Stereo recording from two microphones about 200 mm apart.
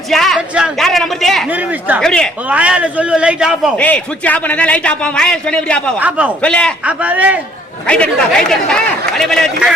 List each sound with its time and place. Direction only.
0.1 s a man's voice: centre (ahead or behind)
2.0 s a man's voice: 5° left (ahead or behind)
6.0 s a man's voice: 5° right (ahead or behind)
6.4 s a man's voice: 5° left (ahead or behind)
6.8 s a man's voice: 5° right (ahead or behind)
7.9 s a man's voice: 5° left (ahead or behind)